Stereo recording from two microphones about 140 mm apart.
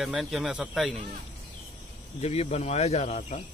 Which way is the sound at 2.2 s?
50° left (ahead or behind).